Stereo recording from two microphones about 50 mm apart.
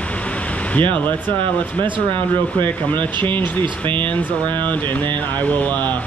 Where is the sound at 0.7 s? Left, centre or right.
Left.